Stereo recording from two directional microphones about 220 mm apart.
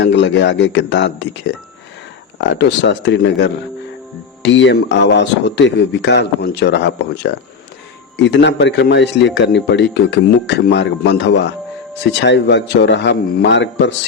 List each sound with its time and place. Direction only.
0.0 s a man's voice: 55° left (ahead or behind)